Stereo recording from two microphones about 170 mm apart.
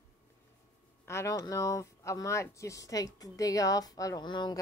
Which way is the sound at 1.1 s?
15° left (ahead or behind).